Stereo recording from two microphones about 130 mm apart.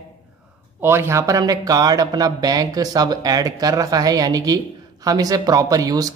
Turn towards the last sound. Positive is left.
turn(degrees=-25)  # may be behind; listen again after turning